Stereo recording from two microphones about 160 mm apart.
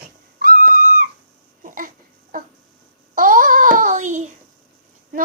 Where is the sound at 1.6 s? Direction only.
55° right (ahead or behind).